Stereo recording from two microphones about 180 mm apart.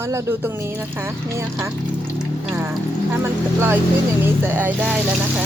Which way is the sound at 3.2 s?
15° right (ahead or behind).